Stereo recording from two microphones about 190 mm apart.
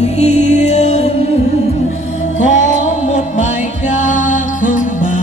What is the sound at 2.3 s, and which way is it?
Music, 40° left (ahead or behind).